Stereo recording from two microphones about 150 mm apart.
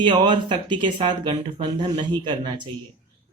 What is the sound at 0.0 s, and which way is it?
Speech, 30° right (ahead or behind).